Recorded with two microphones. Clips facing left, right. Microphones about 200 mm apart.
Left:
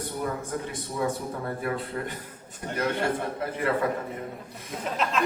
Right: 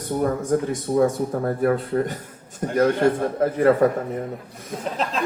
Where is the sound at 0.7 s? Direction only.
45° right (ahead or behind).